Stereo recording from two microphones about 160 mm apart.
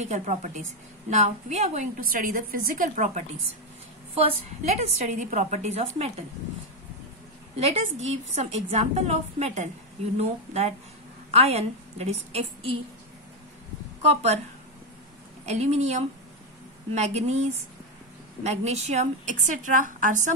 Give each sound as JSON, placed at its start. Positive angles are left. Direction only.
{"t": 0.0, "sound": "a woman's voice", "side_deg": -45}
{"t": 4.1, "sound": "a woman's voice", "side_deg": -40}
{"t": 7.5, "sound": "a woman's voice", "side_deg": -40}
{"t": 14.0, "sound": "a woman's voice", "side_deg": -40}
{"t": 15.4, "sound": "a woman's voice", "side_deg": -45}